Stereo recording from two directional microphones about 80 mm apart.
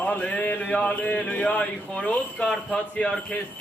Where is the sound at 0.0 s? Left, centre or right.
Centre.